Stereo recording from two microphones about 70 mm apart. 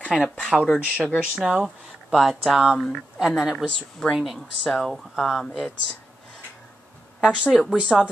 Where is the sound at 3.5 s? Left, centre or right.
Centre.